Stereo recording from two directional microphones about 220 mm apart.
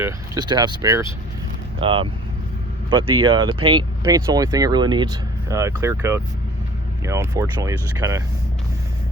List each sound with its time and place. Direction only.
0.0 s speech: 20° right (ahead or behind)